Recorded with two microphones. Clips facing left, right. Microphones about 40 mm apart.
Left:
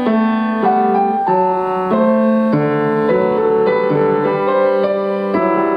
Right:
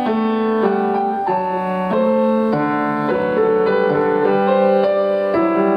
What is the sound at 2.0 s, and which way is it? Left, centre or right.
Music, centre.